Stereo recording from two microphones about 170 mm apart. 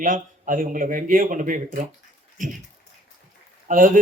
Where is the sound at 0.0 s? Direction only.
50° right (ahead or behind).